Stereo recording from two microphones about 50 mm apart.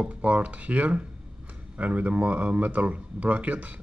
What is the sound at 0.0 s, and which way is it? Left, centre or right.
Speech, right.